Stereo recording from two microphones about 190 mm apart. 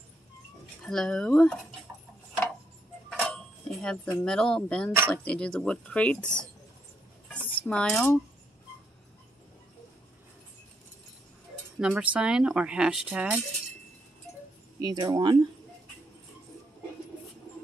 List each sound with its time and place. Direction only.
0.8 s speech: 5° left (ahead or behind)
3.1 s speech: centre (ahead or behind)
7.3 s cutlery: 5° left (ahead or behind)
11.8 s speech: 5° right (ahead or behind)
14.8 s speech: 20° right (ahead or behind)